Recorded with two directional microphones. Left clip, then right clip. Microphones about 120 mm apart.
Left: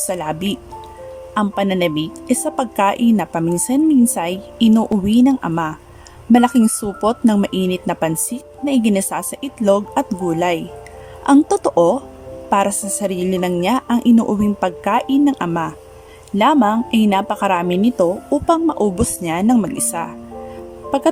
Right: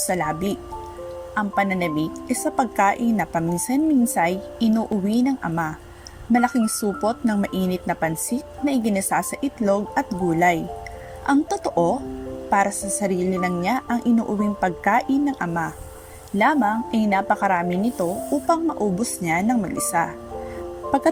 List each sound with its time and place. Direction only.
0.1 s a woman's voice: 20° left (ahead or behind)